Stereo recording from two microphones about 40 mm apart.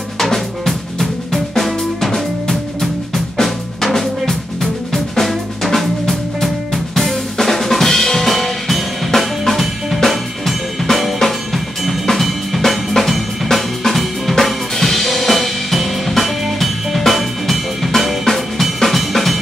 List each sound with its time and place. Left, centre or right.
0.2 s music: centre
3.3 s drum: centre
10.0 s drum kit: centre